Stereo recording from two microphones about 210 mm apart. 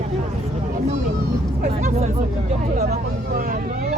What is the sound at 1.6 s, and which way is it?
Speech, 35° right (ahead or behind).